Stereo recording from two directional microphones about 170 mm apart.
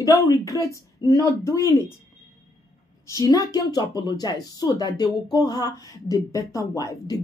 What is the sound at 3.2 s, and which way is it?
Speech, 20° left (ahead or behind).